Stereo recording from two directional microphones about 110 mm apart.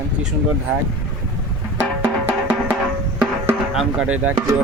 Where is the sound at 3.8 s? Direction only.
10° right (ahead or behind).